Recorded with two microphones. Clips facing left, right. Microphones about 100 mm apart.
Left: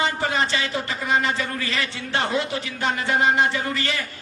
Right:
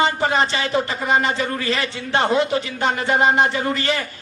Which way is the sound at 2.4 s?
25° right (ahead or behind).